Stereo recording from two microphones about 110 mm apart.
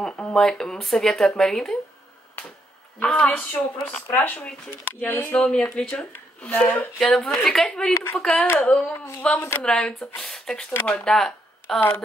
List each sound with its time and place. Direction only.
0.0 s speech: 10° left (ahead or behind)
3.0 s speech: 10° left (ahead or behind)
7.9 s speech: 20° left (ahead or behind)
8.2 s speech: 5° left (ahead or behind)
10.7 s speech: 20° left (ahead or behind)
11.1 s speech: 5° left (ahead or behind)